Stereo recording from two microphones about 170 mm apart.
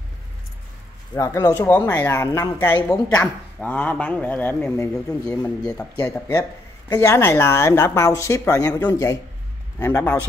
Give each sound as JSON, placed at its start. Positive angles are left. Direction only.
{"t": 1.1, "sound": "speech", "side_deg": 20}
{"t": 3.5, "sound": "speech", "side_deg": 10}